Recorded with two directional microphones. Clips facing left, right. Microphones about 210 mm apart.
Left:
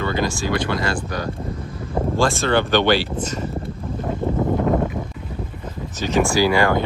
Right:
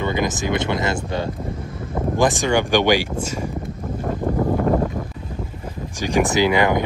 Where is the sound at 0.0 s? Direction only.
20° right (ahead or behind).